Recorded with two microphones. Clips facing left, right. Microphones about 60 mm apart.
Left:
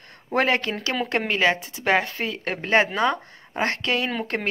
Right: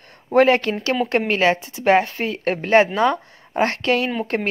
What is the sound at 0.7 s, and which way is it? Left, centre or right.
Speech, centre.